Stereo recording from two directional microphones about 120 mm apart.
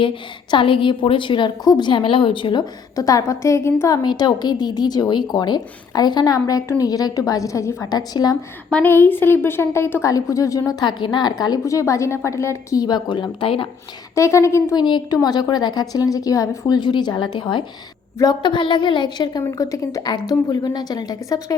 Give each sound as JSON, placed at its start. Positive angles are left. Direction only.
{"t": 0.5, "sound": "a woman's voice", "side_deg": 45}
{"t": 8.7, "sound": "a woman's voice", "side_deg": 15}
{"t": 14.2, "sound": "a woman's voice", "side_deg": 25}
{"t": 14.8, "sound": "a woman's voice", "side_deg": 40}